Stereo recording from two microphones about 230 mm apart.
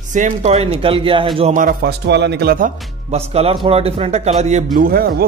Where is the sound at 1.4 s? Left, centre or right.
Right.